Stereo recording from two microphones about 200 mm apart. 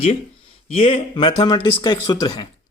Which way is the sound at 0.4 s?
25° left (ahead or behind).